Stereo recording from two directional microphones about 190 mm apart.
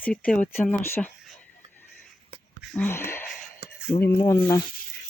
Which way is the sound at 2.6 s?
Centre (ahead or behind).